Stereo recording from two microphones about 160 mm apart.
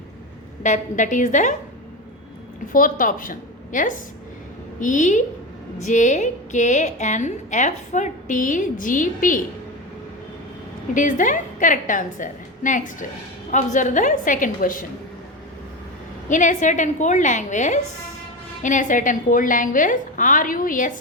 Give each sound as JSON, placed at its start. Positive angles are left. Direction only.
{"t": 0.6, "sound": "a woman's voice", "side_deg": 50}
{"t": 2.7, "sound": "a woman's voice", "side_deg": 60}
{"t": 10.9, "sound": "a woman's voice", "side_deg": 55}
{"t": 16.3, "sound": "a woman's voice", "side_deg": 50}